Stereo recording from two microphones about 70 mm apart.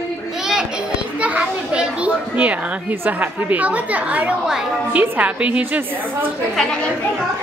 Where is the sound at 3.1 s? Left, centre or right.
Right.